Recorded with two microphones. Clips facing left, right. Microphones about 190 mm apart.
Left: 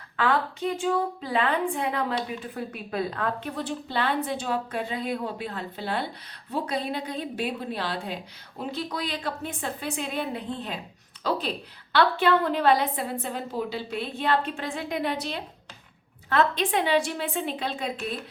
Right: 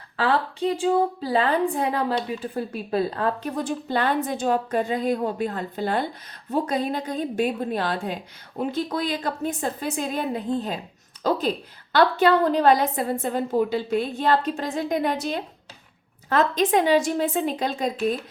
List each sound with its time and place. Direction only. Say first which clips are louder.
0.2 s a woman's voice: right 3 dB; 30° right (ahead or behind)